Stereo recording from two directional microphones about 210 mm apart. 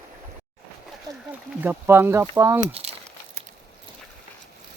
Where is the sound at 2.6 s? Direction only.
30° right (ahead or behind).